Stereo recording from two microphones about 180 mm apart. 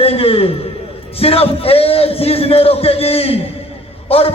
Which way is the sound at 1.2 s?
30° left (ahead or behind).